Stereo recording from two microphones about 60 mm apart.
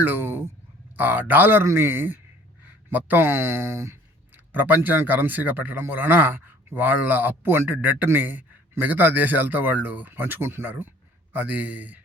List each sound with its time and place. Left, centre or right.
0.0 s a sound: right
0.9 s speech: right
4.5 s speech: right